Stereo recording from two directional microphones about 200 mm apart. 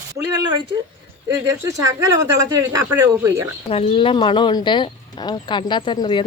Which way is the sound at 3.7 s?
30° left (ahead or behind).